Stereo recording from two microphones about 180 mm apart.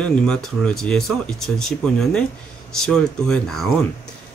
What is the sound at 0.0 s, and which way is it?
Speech, 5° left (ahead or behind).